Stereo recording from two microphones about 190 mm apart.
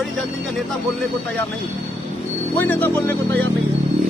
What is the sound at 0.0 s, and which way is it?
Speech, centre (ahead or behind).